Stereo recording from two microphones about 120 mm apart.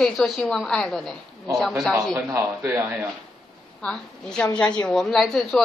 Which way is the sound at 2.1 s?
25° right (ahead or behind).